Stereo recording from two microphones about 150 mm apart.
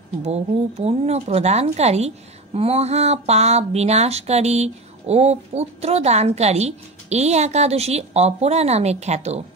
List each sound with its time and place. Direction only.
0.2 s speech: 45° right (ahead or behind)